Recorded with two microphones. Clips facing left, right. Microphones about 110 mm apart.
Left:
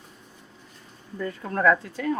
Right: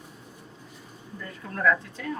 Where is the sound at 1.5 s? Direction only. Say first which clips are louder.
Left 3 dB; 45° left (ahead or behind).